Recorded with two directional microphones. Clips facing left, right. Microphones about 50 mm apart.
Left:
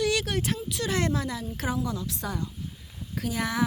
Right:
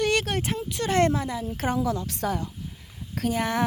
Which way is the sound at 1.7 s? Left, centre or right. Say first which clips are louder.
Right 5 dB; right.